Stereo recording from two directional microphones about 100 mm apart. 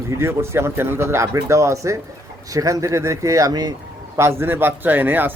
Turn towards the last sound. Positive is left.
turn(degrees=-20)  # may be behind; listen again after turning